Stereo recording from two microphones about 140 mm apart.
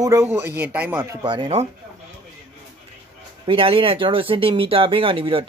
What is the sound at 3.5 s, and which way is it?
Speech, 40° right (ahead or behind).